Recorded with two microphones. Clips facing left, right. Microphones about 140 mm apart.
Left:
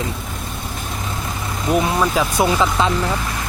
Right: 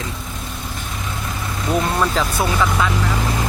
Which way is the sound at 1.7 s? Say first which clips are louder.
Left 2 dB; 10° left (ahead or behind).